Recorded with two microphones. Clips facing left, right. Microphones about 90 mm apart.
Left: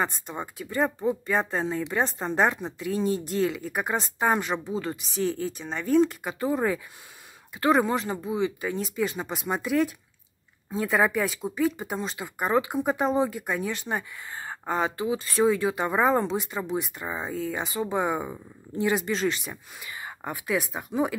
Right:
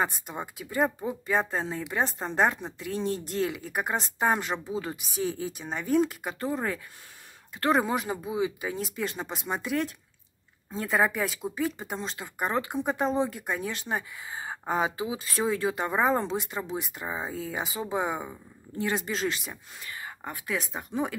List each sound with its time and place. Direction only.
0.0 s speech: 5° right (ahead or behind)
6.4 s speech: 10° left (ahead or behind)
18.3 s speech: 20° left (ahead or behind)
18.9 s speech: centre (ahead or behind)
19.8 s speech: 15° left (ahead or behind)